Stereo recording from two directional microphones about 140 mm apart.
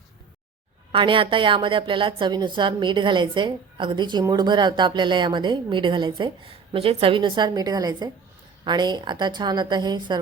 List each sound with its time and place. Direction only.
0.9 s a woman's voice: 35° right (ahead or behind)